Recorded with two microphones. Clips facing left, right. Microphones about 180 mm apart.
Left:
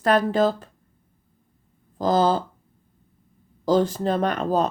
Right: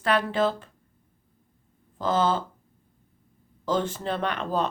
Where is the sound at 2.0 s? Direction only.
35° left (ahead or behind).